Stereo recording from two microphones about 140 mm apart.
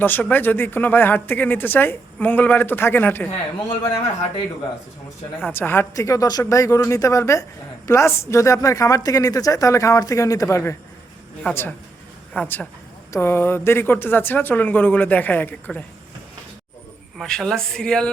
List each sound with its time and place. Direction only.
0.0 s speech: 15° left (ahead or behind)
5.4 s a woman's voice: 15° left (ahead or behind)
17.2 s speech: 5° left (ahead or behind)